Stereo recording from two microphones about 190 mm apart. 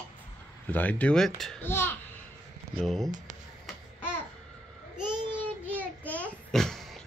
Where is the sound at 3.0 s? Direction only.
40° right (ahead or behind).